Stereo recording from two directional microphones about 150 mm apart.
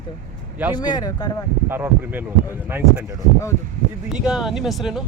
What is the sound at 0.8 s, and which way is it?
Speech, 30° left (ahead or behind).